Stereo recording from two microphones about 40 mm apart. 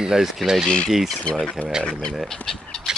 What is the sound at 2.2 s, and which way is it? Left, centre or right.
Speech, centre.